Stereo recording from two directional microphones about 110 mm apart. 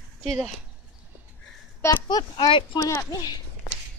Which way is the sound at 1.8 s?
25° left (ahead or behind).